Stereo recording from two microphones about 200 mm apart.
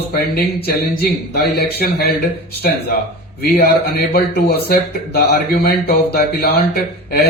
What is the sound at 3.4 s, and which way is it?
Speech, 55° left (ahead or behind).